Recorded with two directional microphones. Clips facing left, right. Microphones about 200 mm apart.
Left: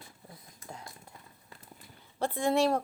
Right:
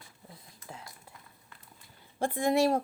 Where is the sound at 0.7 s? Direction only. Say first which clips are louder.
Left 1 dB; centre (ahead or behind).